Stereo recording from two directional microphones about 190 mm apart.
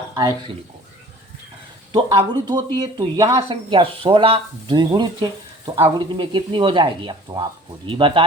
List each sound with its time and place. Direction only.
0.1 s speech: 15° right (ahead or behind)
1.9 s speech: 25° right (ahead or behind)